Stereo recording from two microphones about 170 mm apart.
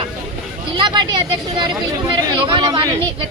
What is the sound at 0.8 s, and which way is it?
A woman's voice, 25° right (ahead or behind).